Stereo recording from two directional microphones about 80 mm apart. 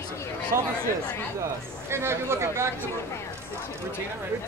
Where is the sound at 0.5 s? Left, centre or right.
Right.